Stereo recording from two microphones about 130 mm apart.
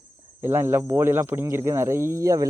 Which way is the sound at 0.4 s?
15° right (ahead or behind).